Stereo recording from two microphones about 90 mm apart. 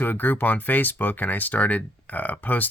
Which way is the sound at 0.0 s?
20° left (ahead or behind).